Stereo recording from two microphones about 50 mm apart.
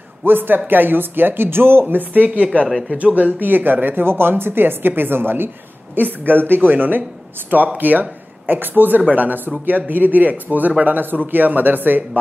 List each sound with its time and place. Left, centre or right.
0.2 s a woman's voice: right
3.3 s a woman's voice: right